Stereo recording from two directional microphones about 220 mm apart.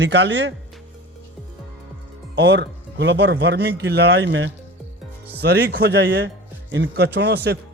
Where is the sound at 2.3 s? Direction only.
50° right (ahead or behind).